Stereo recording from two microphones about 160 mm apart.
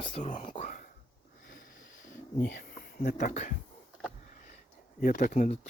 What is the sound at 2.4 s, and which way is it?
Speech, 65° left (ahead or behind).